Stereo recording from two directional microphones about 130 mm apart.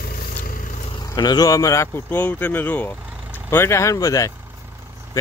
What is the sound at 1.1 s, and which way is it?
Speech, 30° left (ahead or behind).